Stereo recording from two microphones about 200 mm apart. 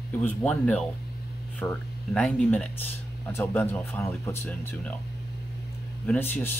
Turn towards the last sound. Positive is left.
turn(degrees=10)  # may be behind; listen again after turning